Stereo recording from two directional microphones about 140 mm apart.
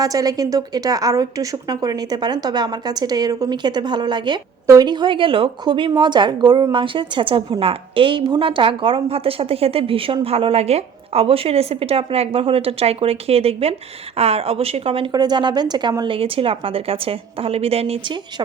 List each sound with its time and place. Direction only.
0.0 s a woman's voice: 25° right (ahead or behind); by 15.1 s 40° right (ahead or behind)
15.1 s a woman's voice: 30° right (ahead or behind)